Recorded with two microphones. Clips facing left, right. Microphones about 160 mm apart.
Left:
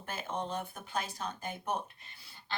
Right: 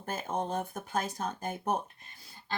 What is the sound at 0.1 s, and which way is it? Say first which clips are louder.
Speech: right 4 dB; 45° right (ahead or behind).